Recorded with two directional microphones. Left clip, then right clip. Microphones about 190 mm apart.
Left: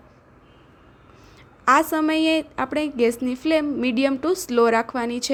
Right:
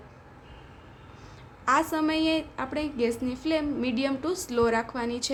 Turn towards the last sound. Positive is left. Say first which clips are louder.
# left 6 dB
turn(degrees=40)  # may be behind; listen again after turning